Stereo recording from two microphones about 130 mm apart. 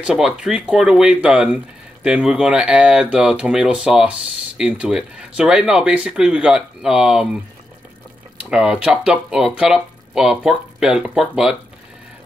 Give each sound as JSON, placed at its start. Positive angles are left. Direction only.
{"t": 0.0, "sound": "speech", "side_deg": -5}
{"t": 8.4, "sound": "speech", "side_deg": -5}